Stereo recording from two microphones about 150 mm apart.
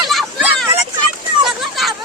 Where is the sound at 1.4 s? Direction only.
Centre (ahead or behind).